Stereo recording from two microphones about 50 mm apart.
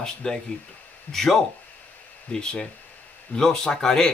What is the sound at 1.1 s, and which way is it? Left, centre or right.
Speech, left.